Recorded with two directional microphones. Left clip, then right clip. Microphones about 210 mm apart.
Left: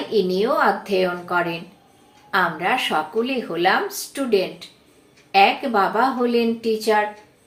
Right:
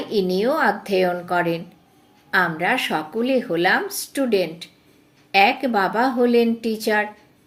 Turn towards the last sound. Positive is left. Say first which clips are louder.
# left 2 dB
turn(degrees=-40)  # may be behind; listen again after turning